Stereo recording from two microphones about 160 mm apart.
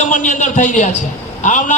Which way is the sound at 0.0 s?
50° left (ahead or behind).